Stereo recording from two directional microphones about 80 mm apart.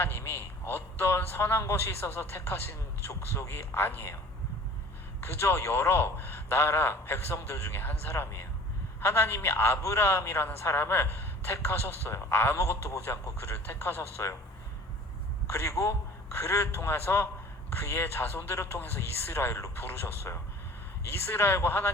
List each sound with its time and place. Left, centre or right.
0.0 s a man's voice: left
5.2 s a man's voice: left
15.4 s a man's voice: left